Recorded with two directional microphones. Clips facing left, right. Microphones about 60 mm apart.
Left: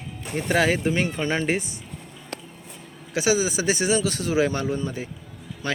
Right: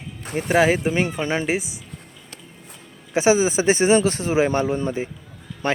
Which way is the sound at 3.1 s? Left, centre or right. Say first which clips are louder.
Right 5 dB; right.